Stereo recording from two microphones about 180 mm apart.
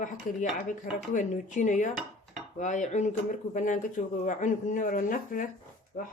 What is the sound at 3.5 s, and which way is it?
Speech, 45° left (ahead or behind).